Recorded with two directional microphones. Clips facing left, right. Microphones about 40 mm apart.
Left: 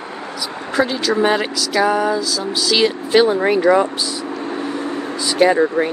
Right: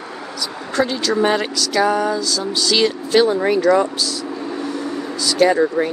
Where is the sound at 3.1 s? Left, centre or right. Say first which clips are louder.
Left 1 dB; left.